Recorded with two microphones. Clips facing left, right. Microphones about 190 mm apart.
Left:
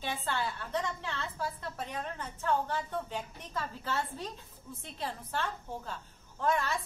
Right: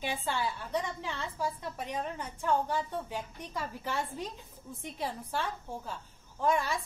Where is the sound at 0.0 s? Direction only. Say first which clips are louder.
Right 1 dB; 10° right (ahead or behind).